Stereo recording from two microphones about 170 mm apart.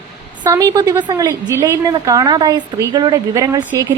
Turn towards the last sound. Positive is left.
turn(degrees=-20)  # may be behind; listen again after turning